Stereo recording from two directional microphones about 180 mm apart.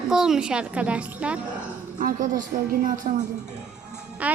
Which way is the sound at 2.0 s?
45° right (ahead or behind).